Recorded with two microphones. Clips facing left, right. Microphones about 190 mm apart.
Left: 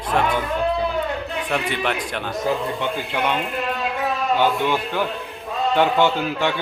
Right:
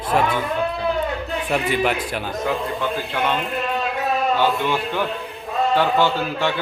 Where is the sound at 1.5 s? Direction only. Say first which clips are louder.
Right 4 dB; 5° right (ahead or behind).